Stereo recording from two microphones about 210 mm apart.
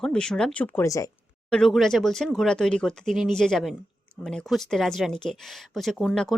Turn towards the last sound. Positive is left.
turn(degrees=0)  # may be behind; listen again after turning